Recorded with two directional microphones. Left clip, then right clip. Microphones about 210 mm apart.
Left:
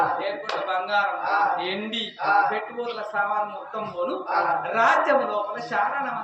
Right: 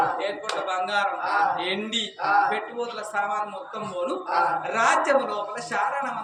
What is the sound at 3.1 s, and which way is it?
Speech, 10° right (ahead or behind).